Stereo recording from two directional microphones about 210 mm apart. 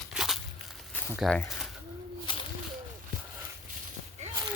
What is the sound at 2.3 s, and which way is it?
Bird, 25° left (ahead or behind).